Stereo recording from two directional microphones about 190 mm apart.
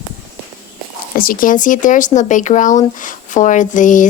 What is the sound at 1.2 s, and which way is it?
Speech, 45° left (ahead or behind).